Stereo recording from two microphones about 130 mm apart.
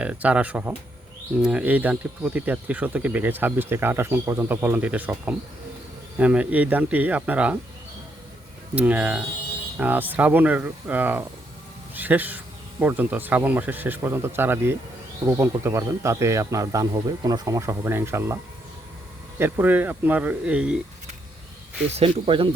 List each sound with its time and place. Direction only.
0.0 s speech: 10° right (ahead or behind)
8.7 s a man's voice: 10° right (ahead or behind)
19.4 s speech: 15° right (ahead or behind)
21.8 s speech: 50° right (ahead or behind)